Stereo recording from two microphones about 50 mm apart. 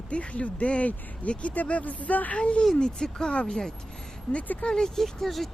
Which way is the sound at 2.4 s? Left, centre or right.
Left.